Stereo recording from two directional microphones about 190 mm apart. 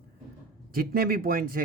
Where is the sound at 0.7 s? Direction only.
50° right (ahead or behind).